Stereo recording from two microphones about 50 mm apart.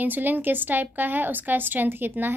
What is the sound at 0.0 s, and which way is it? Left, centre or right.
A woman's voice, right.